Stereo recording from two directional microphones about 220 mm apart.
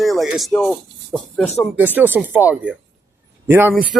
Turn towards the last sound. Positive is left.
turn(degrees=-10)  # may be behind; listen again after turning